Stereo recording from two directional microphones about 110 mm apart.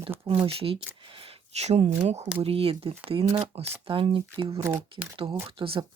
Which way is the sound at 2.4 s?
60° right (ahead or behind).